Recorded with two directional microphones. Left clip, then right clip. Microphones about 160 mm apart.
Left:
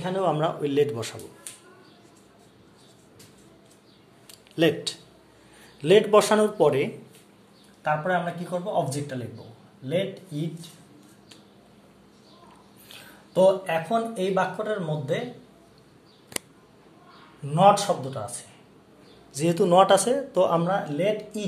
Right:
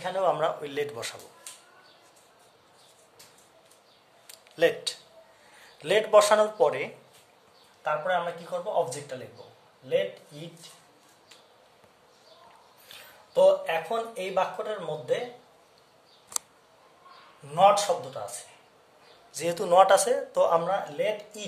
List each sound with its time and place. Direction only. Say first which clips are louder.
0.0 s a man's voice: left 1 dB; 10° right (ahead or behind)
4.3 s a sound: left 1 dB; centre (ahead or behind)
5.8 s a man's voice: left 2 dB; centre (ahead or behind)
12.8 s a sound: left 2 dB; 10° right (ahead or behind)
14.6 s speech: left 4 dB; 15° right (ahead or behind)
17.4 s a man's voice: even; 10° right (ahead or behind)
19.3 s a man's voice: left 2 dB; 5° right (ahead or behind)